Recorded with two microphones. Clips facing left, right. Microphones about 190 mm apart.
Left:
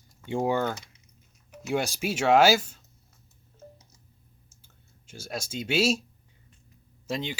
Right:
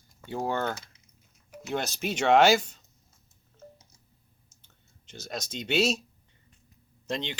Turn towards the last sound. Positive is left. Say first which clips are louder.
# left 1 dB
turn(degrees=5)  # may be behind; listen again after turning